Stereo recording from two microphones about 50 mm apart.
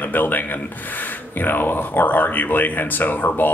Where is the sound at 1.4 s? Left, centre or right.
Left.